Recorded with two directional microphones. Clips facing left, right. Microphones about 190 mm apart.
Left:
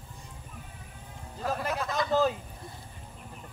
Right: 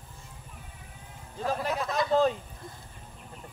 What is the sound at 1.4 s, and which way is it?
Speech, centre (ahead or behind).